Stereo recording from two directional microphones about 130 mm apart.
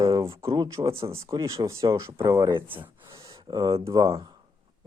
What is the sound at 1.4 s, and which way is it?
Speech, 25° right (ahead or behind).